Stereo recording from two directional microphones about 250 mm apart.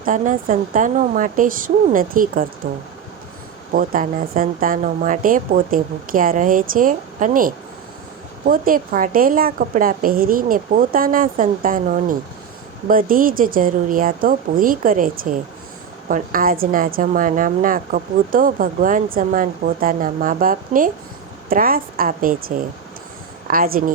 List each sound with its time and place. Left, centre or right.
0.0 s a woman's voice: right
3.7 s a woman's voice: right